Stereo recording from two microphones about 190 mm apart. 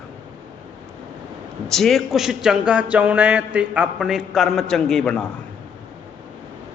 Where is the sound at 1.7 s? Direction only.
Centre (ahead or behind).